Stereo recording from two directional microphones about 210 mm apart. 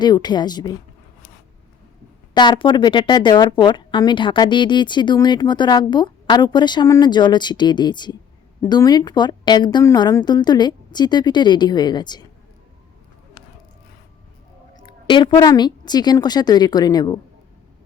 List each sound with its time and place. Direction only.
0.0 s speech: 20° left (ahead or behind)
2.3 s speech: 20° left (ahead or behind)
14.8 s speech: 20° left (ahead or behind)